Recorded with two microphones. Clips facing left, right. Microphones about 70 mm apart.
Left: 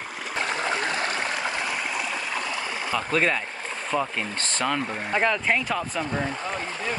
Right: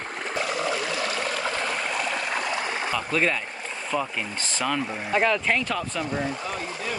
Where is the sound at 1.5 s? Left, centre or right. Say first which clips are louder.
Right 1 dB; centre.